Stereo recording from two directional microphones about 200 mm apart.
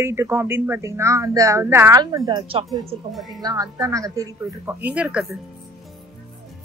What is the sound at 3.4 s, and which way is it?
A woman's voice, 20° right (ahead or behind).